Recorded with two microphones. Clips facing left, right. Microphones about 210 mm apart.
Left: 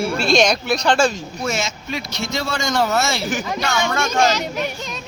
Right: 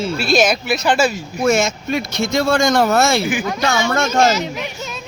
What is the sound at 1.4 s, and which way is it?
Speech, 50° right (ahead or behind).